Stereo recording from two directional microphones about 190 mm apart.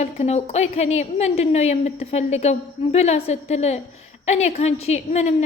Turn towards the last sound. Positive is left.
turn(degrees=35)  # may be behind; listen again after turning